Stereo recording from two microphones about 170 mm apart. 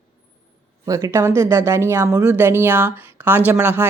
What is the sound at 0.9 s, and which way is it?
A woman's voice, 20° right (ahead or behind).